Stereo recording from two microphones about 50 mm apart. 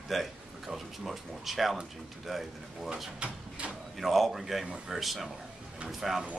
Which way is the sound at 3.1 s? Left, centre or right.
Right.